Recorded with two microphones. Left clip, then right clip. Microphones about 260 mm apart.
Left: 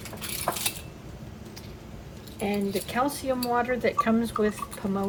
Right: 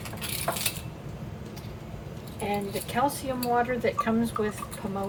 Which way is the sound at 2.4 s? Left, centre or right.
Left.